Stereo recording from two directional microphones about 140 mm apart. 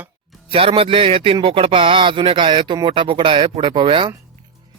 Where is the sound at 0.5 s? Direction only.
40° right (ahead or behind).